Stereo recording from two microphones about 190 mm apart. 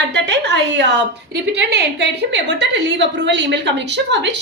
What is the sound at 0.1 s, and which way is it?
A woman's voice, 70° right (ahead or behind).